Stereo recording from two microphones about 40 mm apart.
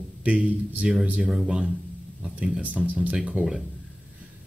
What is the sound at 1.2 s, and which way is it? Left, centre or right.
Speech, centre.